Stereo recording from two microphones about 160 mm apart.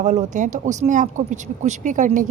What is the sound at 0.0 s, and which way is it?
A woman's voice, 50° right (ahead or behind).